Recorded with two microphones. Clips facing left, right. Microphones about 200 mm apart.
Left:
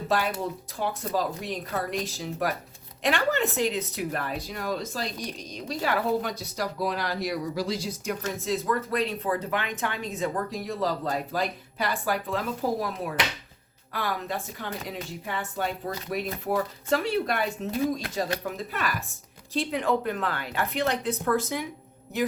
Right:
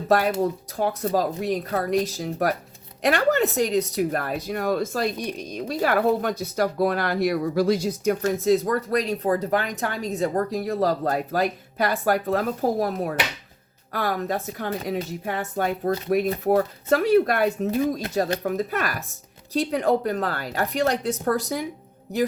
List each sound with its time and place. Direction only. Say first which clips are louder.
0.8 s a woman's voice: right 5 dB; 45° right (ahead or behind)